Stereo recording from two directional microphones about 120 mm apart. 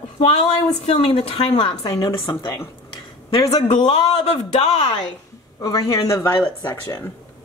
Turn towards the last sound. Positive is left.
turn(degrees=25)  # may be behind; listen again after turning